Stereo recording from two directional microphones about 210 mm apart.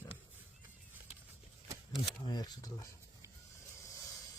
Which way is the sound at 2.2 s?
20° left (ahead or behind).